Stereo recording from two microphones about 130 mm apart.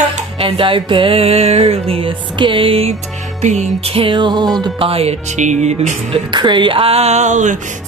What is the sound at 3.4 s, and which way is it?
Music, 65° right (ahead or behind).